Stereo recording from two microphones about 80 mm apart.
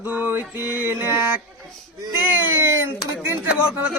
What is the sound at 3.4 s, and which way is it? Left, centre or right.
Speech, centre.